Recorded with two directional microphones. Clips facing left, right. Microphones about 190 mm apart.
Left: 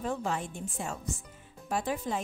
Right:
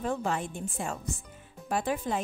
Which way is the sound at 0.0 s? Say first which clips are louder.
Right 2 dB; 60° right (ahead or behind).